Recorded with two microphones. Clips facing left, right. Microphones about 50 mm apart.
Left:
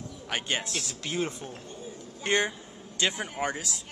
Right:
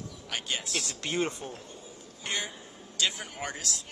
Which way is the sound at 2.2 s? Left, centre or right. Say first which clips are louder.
Left 8 dB; left.